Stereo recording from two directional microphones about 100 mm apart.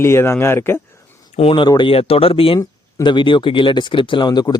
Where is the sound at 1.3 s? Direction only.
65° left (ahead or behind).